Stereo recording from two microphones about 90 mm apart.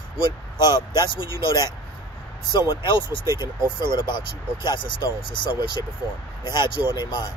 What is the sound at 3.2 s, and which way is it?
Speech, 35° right (ahead or behind).